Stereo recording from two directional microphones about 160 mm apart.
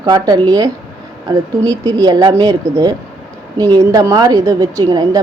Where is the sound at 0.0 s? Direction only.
25° right (ahead or behind).